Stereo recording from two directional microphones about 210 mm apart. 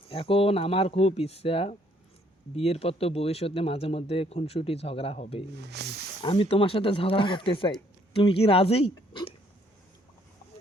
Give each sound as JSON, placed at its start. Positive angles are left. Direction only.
{"t": 0.1, "sound": "speech", "side_deg": 25}
{"t": 5.8, "sound": "wild animals", "side_deg": -55}
{"t": 6.2, "sound": "speech", "side_deg": 25}